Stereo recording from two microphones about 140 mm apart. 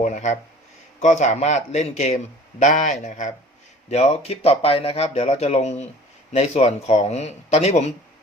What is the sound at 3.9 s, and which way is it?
Speech, 50° left (ahead or behind).